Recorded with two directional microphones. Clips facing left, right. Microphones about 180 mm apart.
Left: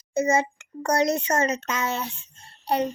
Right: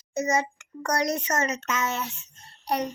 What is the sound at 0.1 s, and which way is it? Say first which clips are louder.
Speech: left 4 dB; 30° left (ahead or behind).